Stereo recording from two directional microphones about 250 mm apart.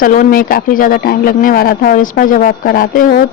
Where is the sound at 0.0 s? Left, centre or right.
Left.